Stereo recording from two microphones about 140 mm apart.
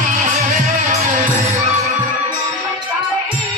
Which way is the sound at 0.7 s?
60° right (ahead or behind).